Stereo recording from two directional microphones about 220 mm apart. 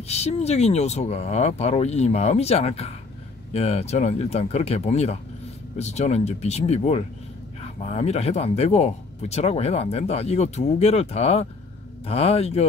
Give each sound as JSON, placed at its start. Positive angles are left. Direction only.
{"t": 0.1, "sound": "speech", "side_deg": 30}